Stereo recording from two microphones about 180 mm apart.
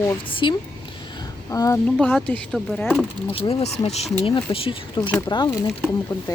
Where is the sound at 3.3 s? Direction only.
35° left (ahead or behind).